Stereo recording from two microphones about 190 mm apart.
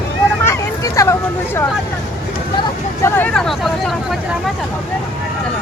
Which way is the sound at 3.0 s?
10° left (ahead or behind).